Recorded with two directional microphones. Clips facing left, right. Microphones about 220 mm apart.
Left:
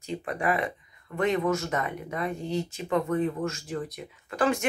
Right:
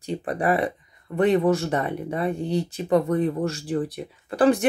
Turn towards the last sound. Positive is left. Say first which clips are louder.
# right 7 dB
turn(degrees=-35)  # may be behind; listen again after turning